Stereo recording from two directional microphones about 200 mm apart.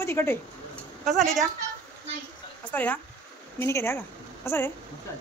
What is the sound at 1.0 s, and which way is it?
Speech, centre (ahead or behind).